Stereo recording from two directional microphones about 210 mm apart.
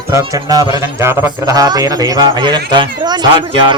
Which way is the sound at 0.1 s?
15° right (ahead or behind).